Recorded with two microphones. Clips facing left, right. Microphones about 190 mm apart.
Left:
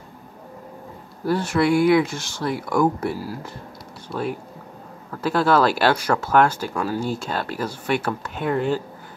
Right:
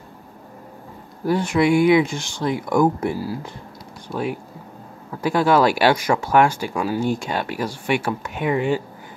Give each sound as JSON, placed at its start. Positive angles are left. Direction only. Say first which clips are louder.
{"t": 1.2, "sound": "speech", "louder": "right 2 dB", "side_deg": -15}